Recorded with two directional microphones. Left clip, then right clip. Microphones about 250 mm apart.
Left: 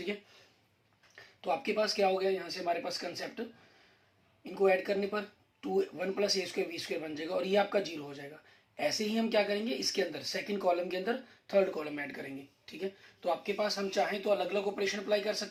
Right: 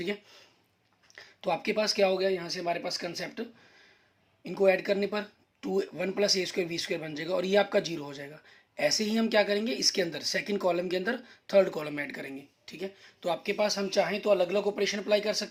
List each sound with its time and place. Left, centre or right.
1.1 s speech: right
4.5 s speech: right